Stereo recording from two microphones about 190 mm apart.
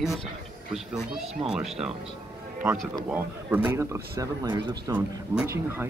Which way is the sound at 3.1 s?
10° right (ahead or behind).